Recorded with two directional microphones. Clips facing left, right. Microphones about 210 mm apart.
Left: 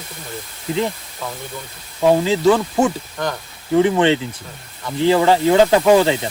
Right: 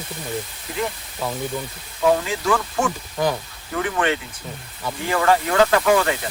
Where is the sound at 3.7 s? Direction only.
25° left (ahead or behind).